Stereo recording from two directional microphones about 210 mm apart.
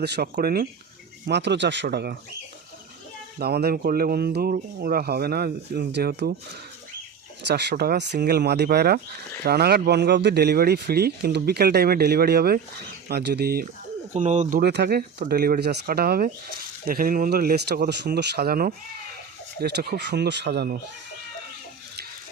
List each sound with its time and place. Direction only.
0.0 s speech: 50° right (ahead or behind)
1.3 s speech: 55° right (ahead or behind)
3.3 s speech: 50° right (ahead or behind)
7.4 s speech: 55° right (ahead or behind)
14.1 s speech: 35° right (ahead or behind)
14.6 s speech: 50° right (ahead or behind)